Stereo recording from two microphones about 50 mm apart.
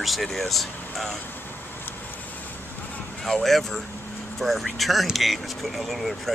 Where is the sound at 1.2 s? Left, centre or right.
Left.